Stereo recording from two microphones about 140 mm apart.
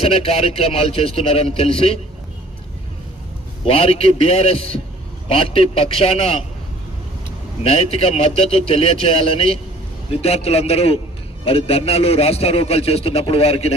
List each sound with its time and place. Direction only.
0.0 s a man's voice: 45° left (ahead or behind)
3.7 s a man's voice: 45° left (ahead or behind)
7.6 s a man's voice: 45° left (ahead or behind)